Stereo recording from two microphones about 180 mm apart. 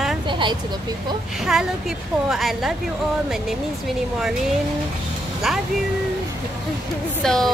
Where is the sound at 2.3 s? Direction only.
Centre (ahead or behind).